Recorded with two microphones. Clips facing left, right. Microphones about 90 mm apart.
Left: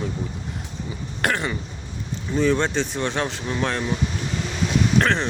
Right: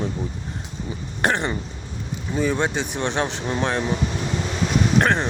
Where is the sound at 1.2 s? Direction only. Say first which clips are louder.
Right 2 dB; 25° right (ahead or behind).